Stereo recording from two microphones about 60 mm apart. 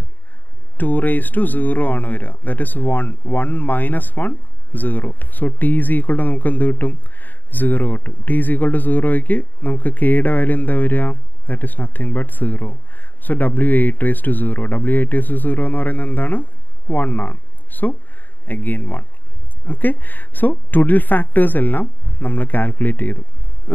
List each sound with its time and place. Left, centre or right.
0.7 s a woman's voice: left